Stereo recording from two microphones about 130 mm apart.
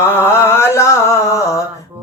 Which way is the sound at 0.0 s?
20° left (ahead or behind).